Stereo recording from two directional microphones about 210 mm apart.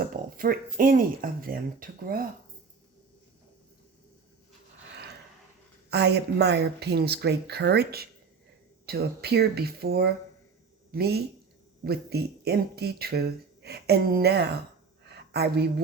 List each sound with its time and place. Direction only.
0.0 s speech: 45° right (ahead or behind)
5.9 s speech: 50° right (ahead or behind)
15.0 s a sound: 50° right (ahead or behind)